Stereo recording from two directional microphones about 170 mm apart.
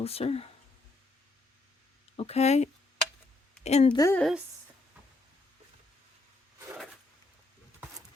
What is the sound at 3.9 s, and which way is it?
Speech, 20° left (ahead or behind).